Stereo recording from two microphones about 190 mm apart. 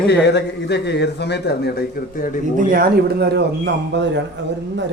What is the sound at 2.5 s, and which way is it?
A woman's voice, 50° right (ahead or behind).